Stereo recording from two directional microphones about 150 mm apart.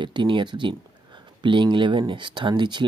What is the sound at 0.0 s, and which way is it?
Speech, 30° right (ahead or behind).